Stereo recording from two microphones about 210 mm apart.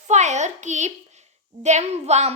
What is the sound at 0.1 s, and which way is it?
A child's voice, 35° right (ahead or behind).